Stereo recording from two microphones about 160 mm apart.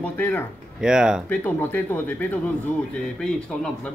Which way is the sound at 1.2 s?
10° left (ahead or behind).